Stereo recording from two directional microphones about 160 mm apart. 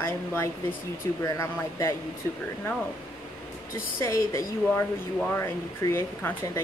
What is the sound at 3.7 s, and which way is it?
Speech, 15° left (ahead or behind).